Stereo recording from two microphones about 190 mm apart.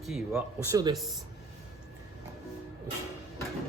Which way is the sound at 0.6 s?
20° right (ahead or behind).